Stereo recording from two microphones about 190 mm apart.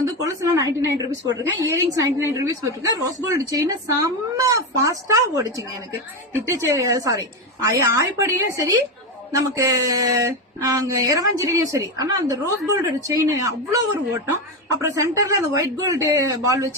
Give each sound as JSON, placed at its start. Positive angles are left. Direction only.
{"t": 0.0, "sound": "speech", "side_deg": -15}